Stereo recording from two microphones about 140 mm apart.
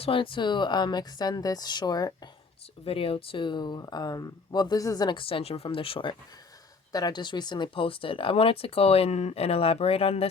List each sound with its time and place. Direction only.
0.0 s speech: 40° left (ahead or behind)
2.8 s speech: 40° left (ahead or behind)